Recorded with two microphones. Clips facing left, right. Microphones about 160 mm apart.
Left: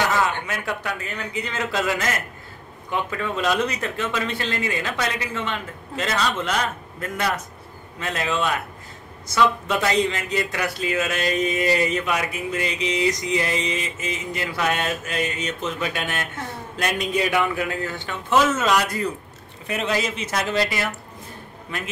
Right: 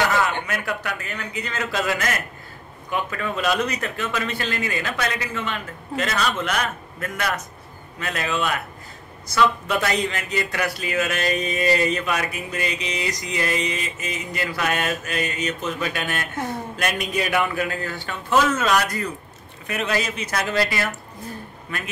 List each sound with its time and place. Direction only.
0.5 s speech: 25° left (ahead or behind)
8.0 s speech: 25° left (ahead or behind)